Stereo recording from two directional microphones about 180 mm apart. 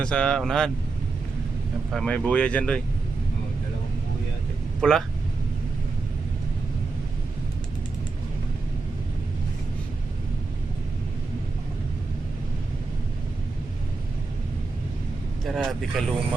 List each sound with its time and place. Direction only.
0.0 s speech: 5° left (ahead or behind)
1.9 s speech: 5° left (ahead or behind)
4.8 s speech: centre (ahead or behind)
15.4 s speech: centre (ahead or behind)